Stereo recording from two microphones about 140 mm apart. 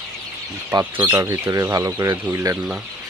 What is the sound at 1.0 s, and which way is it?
Speech, 20° right (ahead or behind).